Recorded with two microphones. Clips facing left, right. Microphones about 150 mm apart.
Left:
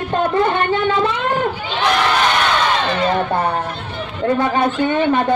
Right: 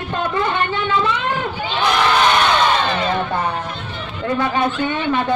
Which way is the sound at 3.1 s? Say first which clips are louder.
Left 3 dB; 35° left (ahead or behind).